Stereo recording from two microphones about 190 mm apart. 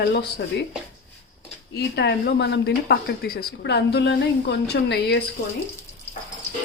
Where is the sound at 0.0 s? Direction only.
60° left (ahead or behind).